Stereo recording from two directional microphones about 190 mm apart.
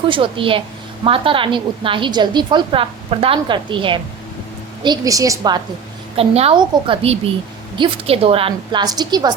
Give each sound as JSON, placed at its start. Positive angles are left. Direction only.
{"t": 0.1, "sound": "a woman's voice", "side_deg": -25}
{"t": 6.1, "sound": "a woman's voice", "side_deg": -30}